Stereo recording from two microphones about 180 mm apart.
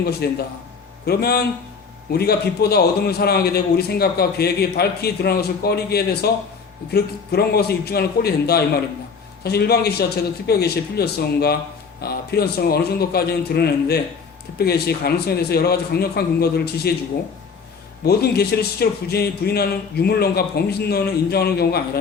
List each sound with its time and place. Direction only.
0.2 s a man's voice: 65° left (ahead or behind)
18.0 s a man's voice: 60° left (ahead or behind)